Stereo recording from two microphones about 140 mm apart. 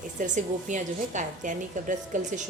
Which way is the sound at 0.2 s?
60° right (ahead or behind).